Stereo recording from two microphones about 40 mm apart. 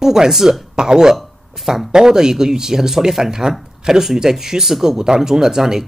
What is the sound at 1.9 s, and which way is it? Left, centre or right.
Speech, centre.